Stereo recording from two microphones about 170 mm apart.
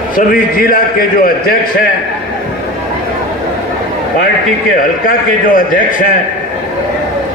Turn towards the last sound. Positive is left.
turn(degrees=55)  # may be behind; listen again after turning